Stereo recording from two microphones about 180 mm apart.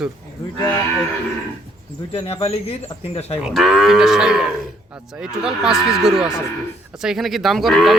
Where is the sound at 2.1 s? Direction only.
35° left (ahead or behind).